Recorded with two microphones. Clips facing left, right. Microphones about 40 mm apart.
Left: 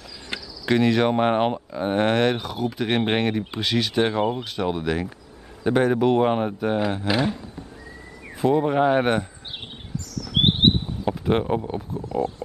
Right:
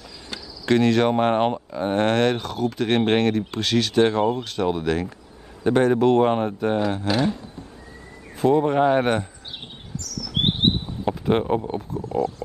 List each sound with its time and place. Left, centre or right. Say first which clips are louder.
0.3 s insect: left 3 dB; left
0.7 s speech: right 1 dB; centre
8.4 s speech: right 1 dB; centre
10.4 s a sound: left 3 dB; left
11.1 s speech: right 1 dB; centre